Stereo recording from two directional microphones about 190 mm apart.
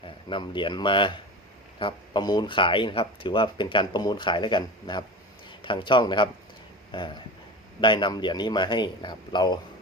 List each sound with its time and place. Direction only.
0.3 s speech: 25° left (ahead or behind)